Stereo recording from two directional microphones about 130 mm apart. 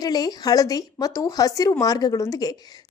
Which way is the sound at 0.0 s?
30° left (ahead or behind).